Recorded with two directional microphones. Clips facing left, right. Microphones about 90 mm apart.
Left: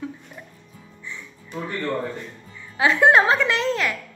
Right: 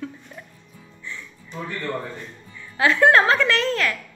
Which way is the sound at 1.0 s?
15° left (ahead or behind).